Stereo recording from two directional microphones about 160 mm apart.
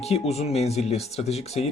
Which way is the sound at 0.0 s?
40° left (ahead or behind).